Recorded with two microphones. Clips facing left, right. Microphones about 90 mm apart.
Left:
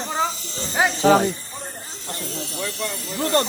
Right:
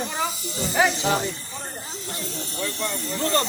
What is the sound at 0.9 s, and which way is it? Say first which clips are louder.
Speech: left 8 dB; 40° left (ahead or behind).